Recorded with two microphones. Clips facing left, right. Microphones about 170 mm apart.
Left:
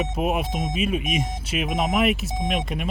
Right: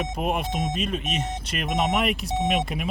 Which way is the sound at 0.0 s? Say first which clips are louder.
Left 2 dB; 5° left (ahead or behind).